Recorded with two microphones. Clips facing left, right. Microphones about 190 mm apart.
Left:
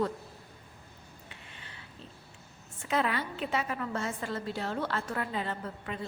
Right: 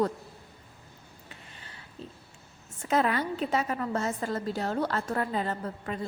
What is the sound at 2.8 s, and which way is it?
A woman's voice, 40° right (ahead or behind).